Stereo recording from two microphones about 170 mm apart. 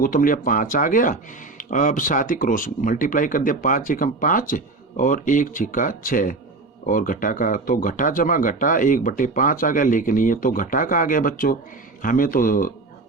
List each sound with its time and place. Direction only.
0.0 s speech: 55° left (ahead or behind)